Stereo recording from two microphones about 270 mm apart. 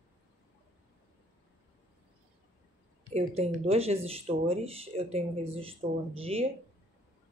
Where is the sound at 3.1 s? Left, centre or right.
Right.